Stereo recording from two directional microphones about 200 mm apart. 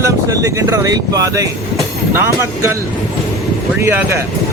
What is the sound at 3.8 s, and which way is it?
Speech, 15° right (ahead or behind).